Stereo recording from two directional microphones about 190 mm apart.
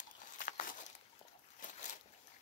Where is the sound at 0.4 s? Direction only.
45° left (ahead or behind).